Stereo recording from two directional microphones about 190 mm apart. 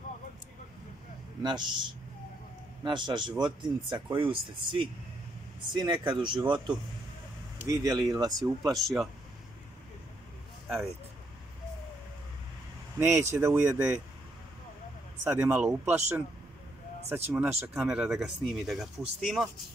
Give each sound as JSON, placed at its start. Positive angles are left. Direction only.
{"t": 1.4, "sound": "speech", "side_deg": -25}
{"t": 7.6, "sound": "speech", "side_deg": -20}
{"t": 8.6, "sound": "speech", "side_deg": 0}
{"t": 13.0, "sound": "speech", "side_deg": -15}
{"t": 15.2, "sound": "speech", "side_deg": -10}
{"t": 17.1, "sound": "speech", "side_deg": -10}